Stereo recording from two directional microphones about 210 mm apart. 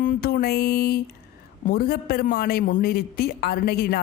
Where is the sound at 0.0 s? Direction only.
45° left (ahead or behind).